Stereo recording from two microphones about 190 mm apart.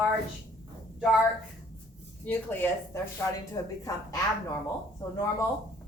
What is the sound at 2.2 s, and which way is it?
Speech, 10° left (ahead or behind).